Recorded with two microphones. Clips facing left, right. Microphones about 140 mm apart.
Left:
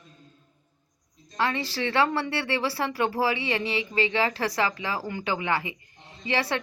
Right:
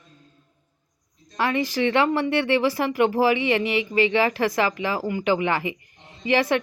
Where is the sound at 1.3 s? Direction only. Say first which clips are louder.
Right 5 dB; 15° right (ahead or behind).